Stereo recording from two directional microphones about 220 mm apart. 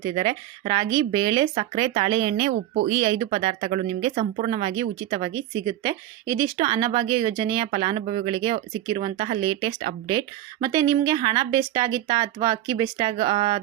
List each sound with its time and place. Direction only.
0.0 s speech: 25° right (ahead or behind)